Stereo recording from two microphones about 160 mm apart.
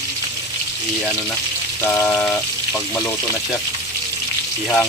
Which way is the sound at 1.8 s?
15° left (ahead or behind).